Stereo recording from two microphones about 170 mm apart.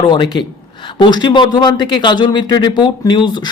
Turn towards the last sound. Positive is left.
turn(degrees=25)  # may be behind; listen again after turning